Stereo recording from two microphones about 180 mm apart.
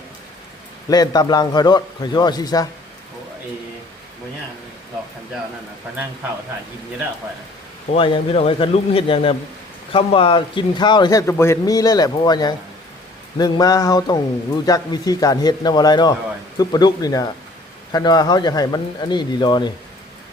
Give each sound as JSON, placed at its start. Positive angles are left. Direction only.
{"t": 0.9, "sound": "a man's voice", "side_deg": 20}
{"t": 7.9, "sound": "a man's voice", "side_deg": 30}